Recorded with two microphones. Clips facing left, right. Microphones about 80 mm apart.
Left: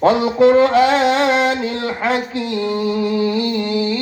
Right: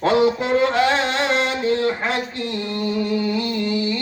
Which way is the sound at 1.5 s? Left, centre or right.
Left.